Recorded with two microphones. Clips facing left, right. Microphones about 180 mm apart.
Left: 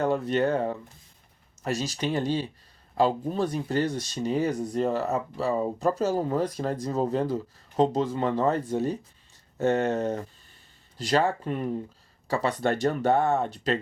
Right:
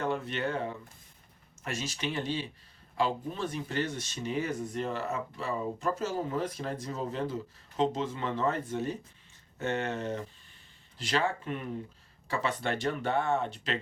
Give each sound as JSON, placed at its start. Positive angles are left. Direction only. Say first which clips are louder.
{"t": 0.0, "sound": "speech", "louder": "left 8 dB", "side_deg": 40}